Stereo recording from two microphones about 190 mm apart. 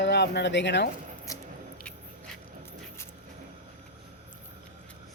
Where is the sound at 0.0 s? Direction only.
65° left (ahead or behind).